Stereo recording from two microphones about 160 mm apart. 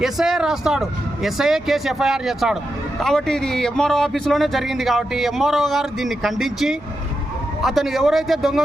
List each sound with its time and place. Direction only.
0.0 s speech: centre (ahead or behind)